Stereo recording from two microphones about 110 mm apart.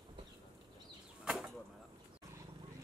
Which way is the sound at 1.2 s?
5° right (ahead or behind).